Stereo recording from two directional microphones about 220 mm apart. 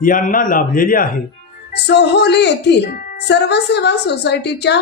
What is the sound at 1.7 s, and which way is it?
A woman's voice, 50° left (ahead or behind).